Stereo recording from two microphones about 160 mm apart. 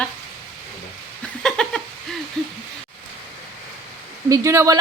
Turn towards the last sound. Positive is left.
turn(degrees=-20)  # may be behind; listen again after turning